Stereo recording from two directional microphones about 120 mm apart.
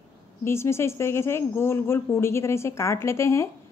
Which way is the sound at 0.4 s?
20° left (ahead or behind).